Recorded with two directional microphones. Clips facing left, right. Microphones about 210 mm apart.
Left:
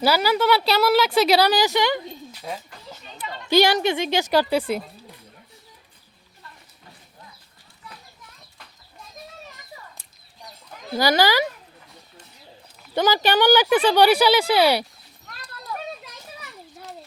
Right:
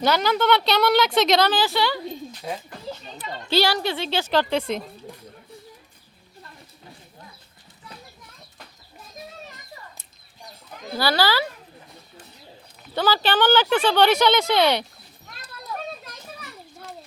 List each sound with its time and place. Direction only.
0.0 s speech: 5° left (ahead or behind)
3.5 s speech: 15° left (ahead or behind)
10.9 s speech: 15° left (ahead or behind)
12.9 s speech: 15° left (ahead or behind)